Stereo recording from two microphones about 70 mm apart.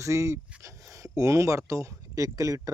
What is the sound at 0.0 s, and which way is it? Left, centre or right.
Speech, right.